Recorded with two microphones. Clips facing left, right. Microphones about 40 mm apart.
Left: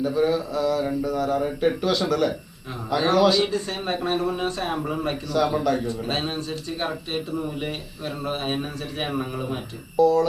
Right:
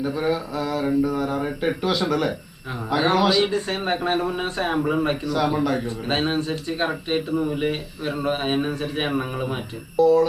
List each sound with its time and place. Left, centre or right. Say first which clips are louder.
0.0 s mantra: left 2 dB; centre
3.5 s speech: right 3 dB; right
5.2 s mantra: even; centre
5.8 s speech: right 2 dB; right
10.0 s mantra: right 2 dB; centre